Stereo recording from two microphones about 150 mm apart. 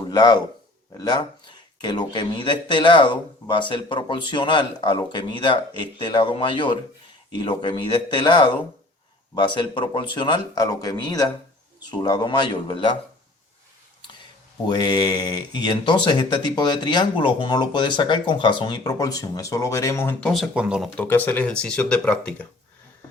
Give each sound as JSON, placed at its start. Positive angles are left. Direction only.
{"t": 0.1, "sound": "speech", "side_deg": 30}
{"t": 14.7, "sound": "speech", "side_deg": 30}
{"t": 20.3, "sound": "speech", "side_deg": -5}
{"t": 20.9, "sound": "speech", "side_deg": 10}